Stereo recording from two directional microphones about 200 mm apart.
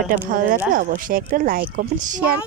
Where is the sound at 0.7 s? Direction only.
45° right (ahead or behind).